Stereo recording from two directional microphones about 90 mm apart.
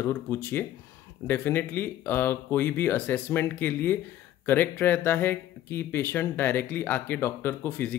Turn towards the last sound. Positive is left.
turn(degrees=20)  # may be behind; listen again after turning